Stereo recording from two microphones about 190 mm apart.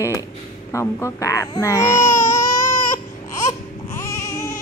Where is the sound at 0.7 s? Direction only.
15° left (ahead or behind).